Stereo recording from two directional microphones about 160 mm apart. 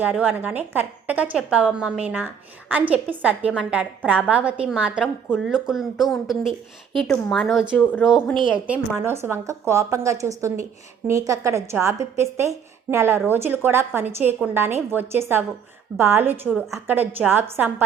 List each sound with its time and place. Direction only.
0.0 s a woman's voice: 10° right (ahead or behind)
8.6 s a woman's voice: 10° right (ahead or behind)